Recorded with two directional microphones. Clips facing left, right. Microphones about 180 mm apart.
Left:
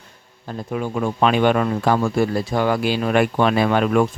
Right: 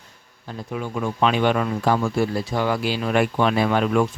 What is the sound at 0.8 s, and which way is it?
Speech, 50° left (ahead or behind).